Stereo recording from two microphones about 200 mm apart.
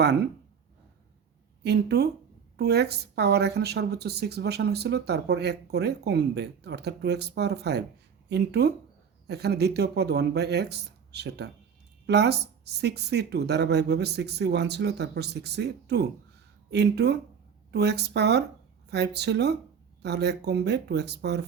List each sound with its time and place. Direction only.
0.0 s a woman's voice: 55° right (ahead or behind)
1.6 s a woman's voice: 55° right (ahead or behind)